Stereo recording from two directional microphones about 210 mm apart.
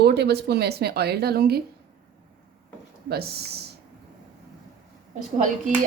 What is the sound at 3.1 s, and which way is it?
Speech, 50° right (ahead or behind).